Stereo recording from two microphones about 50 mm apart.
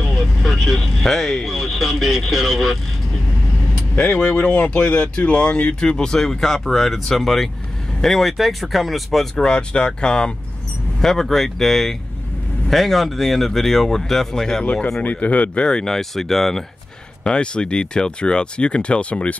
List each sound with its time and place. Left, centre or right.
0.5 s speech: centre
4.0 s speech: centre
9.4 s speech: centre
14.7 s speech: left; by 16.6 s centre
17.2 s speech: centre